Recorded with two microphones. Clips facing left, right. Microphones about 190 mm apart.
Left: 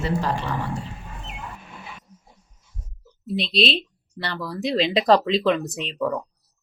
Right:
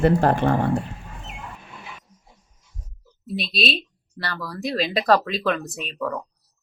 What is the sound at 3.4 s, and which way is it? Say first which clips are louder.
Speech: left 3 dB; 25° left (ahead or behind).